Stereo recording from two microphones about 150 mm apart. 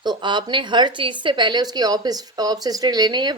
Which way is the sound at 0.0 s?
30° right (ahead or behind).